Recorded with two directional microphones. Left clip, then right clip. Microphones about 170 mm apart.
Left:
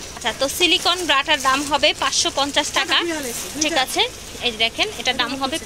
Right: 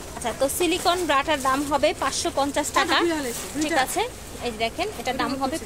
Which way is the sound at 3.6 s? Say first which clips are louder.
Left 4 dB; centre (ahead or behind).